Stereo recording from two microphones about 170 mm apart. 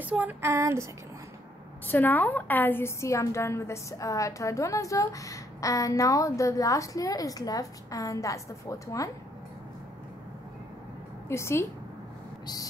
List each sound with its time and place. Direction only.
0.0 s a sound: 10° right (ahead or behind)
1.9 s a woman's voice: 10° left (ahead or behind)
11.2 s a woman's voice: 15° left (ahead or behind)